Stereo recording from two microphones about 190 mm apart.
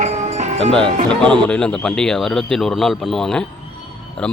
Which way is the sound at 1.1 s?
5° left (ahead or behind).